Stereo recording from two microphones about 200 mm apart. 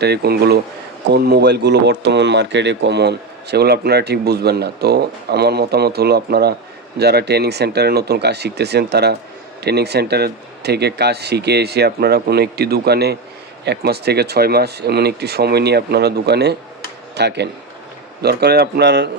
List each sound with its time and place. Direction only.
0.0 s speech: 55° right (ahead or behind)